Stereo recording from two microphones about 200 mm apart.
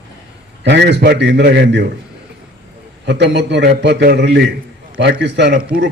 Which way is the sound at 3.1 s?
60° right (ahead or behind).